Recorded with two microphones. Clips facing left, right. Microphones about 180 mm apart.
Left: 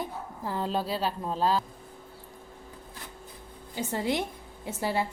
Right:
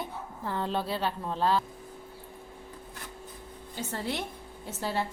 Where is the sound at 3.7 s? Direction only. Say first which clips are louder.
Left 5 dB; 15° left (ahead or behind).